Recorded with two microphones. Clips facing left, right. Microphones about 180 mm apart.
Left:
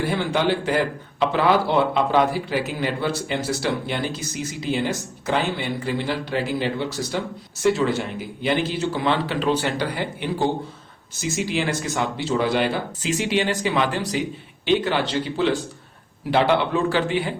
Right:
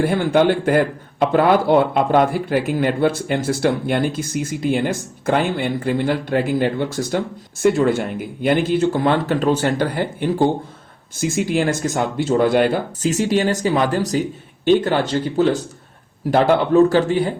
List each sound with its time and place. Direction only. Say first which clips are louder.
0.0 s a man's voice: right 6 dB; 50° right (ahead or behind)